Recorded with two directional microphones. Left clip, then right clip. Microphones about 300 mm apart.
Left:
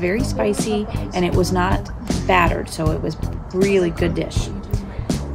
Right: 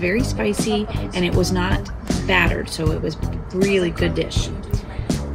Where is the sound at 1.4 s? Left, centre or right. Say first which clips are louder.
Left 3 dB; centre.